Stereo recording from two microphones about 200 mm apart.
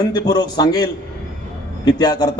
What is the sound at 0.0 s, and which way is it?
A man's voice, 20° left (ahead or behind).